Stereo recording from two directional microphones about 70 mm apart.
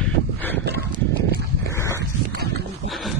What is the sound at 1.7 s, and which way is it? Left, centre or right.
Dog, left.